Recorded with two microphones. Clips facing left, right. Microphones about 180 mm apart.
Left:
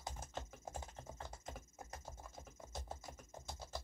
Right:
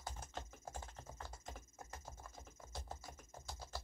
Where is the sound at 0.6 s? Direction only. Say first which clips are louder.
Left 2 dB; 20° left (ahead or behind).